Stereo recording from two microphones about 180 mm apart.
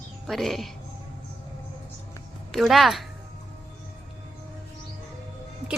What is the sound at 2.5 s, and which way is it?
Speech, centre (ahead or behind).